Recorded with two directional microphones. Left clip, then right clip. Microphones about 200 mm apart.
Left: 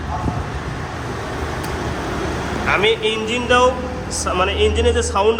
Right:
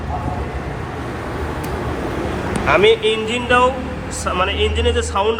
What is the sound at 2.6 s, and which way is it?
A man's voice, centre (ahead or behind).